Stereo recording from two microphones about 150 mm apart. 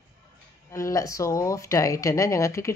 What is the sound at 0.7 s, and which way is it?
Speech, 20° left (ahead or behind).